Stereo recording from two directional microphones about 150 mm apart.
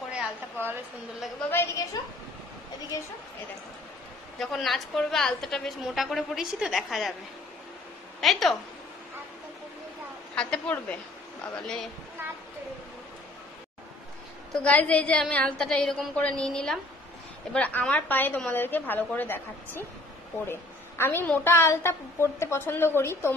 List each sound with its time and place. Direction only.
0.1 s a sound: 10° right (ahead or behind)
2.9 s a woman's voice: 20° left (ahead or behind)
4.4 s a woman's voice: centre (ahead or behind)
8.2 s a woman's voice: centre (ahead or behind)
10.3 s a woman's voice: 5° left (ahead or behind)
14.5 s a woman's voice: 10° left (ahead or behind)
21.0 s a woman's voice: 15° left (ahead or behind)